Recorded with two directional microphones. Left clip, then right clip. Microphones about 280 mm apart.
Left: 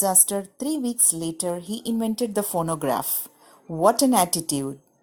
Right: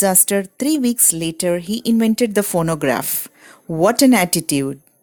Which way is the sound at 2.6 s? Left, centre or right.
Right.